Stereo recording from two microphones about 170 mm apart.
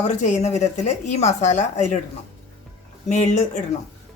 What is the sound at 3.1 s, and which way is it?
Speech, 45° left (ahead or behind).